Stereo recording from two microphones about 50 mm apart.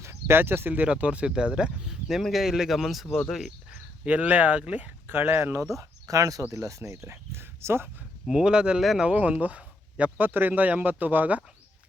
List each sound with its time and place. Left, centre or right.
0.0 s a sound: right
0.7 s speech: right; by 3.3 s centre
4.0 s speech: right
5.0 s speech: right
6.1 s speech: right
8.3 s speech: centre
10.2 s speech: right